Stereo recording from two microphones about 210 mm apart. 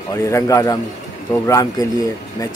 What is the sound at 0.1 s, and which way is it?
Speech, 15° left (ahead or behind).